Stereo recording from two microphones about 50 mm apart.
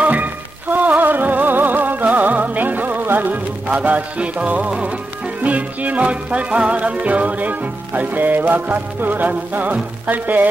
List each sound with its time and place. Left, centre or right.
0.0 s music: right
3.8 s music: right